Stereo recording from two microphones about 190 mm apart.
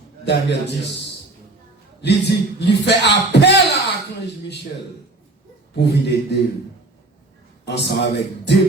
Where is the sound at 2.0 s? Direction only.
65° left (ahead or behind).